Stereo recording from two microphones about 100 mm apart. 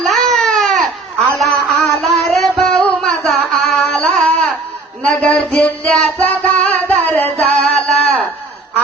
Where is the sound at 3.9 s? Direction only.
15° left (ahead or behind).